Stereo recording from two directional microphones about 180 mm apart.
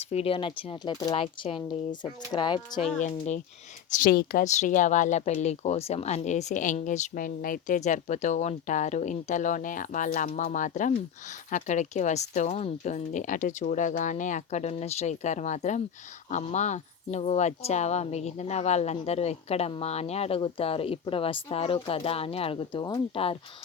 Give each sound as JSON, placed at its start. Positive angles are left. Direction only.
{"t": 0.0, "sound": "speech", "side_deg": 35}
{"t": 3.0, "sound": "speech", "side_deg": 40}
{"t": 4.0, "sound": "speech", "side_deg": 55}